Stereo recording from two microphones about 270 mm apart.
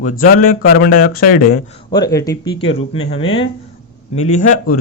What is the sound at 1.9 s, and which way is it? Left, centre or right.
A man's voice, centre.